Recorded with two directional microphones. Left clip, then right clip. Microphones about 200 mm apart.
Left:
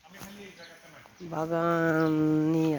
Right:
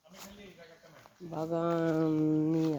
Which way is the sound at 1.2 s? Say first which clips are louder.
Left 5 dB; 20° left (ahead or behind).